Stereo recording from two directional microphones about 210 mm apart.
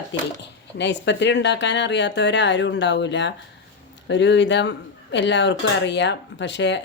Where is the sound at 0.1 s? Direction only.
55° left (ahead or behind).